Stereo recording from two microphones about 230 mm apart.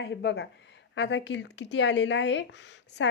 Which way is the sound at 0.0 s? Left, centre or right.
Left.